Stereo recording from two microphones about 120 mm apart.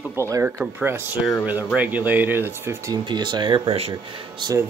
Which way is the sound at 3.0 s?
40° right (ahead or behind).